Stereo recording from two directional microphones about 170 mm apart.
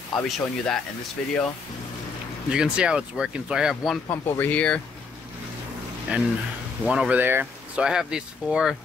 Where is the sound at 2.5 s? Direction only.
5° right (ahead or behind).